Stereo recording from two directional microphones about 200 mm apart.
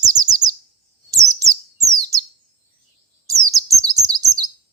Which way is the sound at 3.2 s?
15° right (ahead or behind).